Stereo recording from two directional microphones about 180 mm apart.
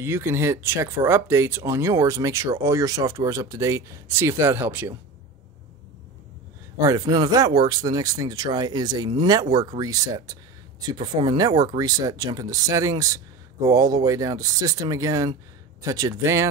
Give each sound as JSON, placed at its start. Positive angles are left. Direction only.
{"t": 0.0, "sound": "speech", "side_deg": -15}
{"t": 6.8, "sound": "speech", "side_deg": -20}